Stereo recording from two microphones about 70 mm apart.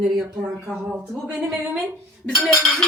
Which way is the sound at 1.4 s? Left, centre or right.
Centre.